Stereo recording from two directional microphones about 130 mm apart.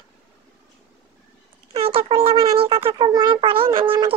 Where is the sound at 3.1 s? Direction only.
35° right (ahead or behind).